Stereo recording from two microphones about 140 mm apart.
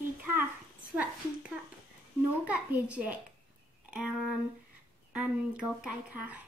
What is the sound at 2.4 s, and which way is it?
Speech, 10° right (ahead or behind).